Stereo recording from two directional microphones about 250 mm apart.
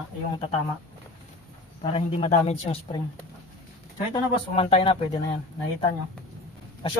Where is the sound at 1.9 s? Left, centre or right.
Left.